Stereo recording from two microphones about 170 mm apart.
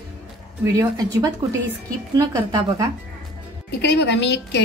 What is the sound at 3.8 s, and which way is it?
Speech, 85° left.